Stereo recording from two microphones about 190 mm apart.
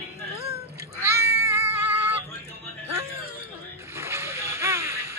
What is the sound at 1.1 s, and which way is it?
Cat, 15° right (ahead or behind).